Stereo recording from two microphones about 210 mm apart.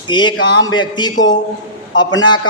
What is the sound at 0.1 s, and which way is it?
Speech, 20° left (ahead or behind).